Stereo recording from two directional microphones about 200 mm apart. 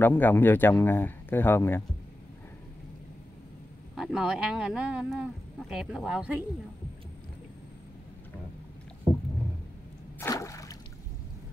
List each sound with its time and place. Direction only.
0.0 s speech: 10° left (ahead or behind)
3.9 s speech: centre (ahead or behind)
10.2 s a sound: 15° left (ahead or behind)